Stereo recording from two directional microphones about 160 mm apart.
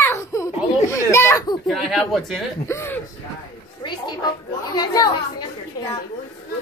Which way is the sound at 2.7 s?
15° left (ahead or behind).